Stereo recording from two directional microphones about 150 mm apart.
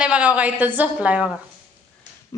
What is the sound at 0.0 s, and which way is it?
A woman's voice, 10° right (ahead or behind).